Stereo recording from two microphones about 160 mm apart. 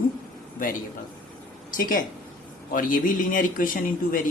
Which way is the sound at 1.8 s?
60° left (ahead or behind).